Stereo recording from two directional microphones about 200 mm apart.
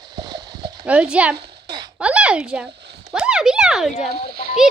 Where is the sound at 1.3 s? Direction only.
55° right (ahead or behind).